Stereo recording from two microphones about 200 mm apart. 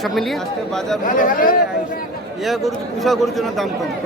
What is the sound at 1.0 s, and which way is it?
Speech, 40° left (ahead or behind).